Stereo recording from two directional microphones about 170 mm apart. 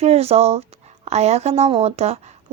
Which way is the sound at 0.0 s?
35° right (ahead or behind).